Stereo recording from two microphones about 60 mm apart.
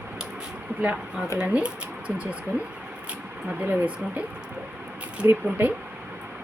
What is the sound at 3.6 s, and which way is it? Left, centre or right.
Speech, right.